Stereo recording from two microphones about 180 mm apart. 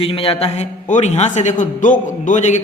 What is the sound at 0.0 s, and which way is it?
A man's voice, 30° left (ahead or behind).